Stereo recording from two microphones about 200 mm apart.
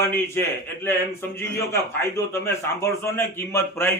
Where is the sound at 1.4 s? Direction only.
15° left (ahead or behind).